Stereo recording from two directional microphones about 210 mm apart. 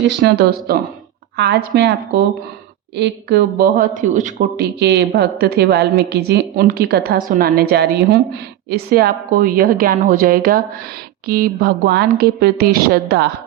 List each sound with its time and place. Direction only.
0.2 s a woman's voice: 50° right (ahead or behind)
4.8 s a woman's voice: 55° right (ahead or behind)